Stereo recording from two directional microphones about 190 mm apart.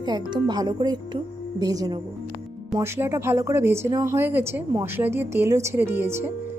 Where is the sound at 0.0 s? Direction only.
25° right (ahead or behind).